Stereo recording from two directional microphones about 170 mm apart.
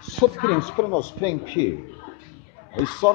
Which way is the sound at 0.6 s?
10° left (ahead or behind).